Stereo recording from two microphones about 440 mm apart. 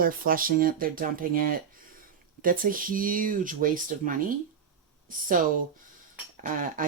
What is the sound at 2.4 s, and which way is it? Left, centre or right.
Speech, centre.